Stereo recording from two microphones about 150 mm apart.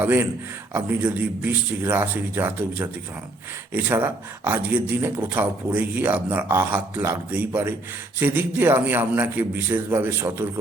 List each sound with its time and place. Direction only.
0.0 s a man's voice: 10° right (ahead or behind)